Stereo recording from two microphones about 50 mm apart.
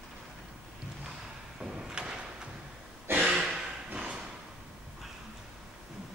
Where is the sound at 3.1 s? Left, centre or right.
Right.